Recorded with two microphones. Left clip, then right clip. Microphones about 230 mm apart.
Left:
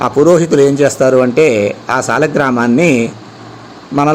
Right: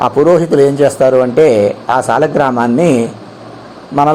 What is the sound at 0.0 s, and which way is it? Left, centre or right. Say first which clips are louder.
A man's voice: even; centre.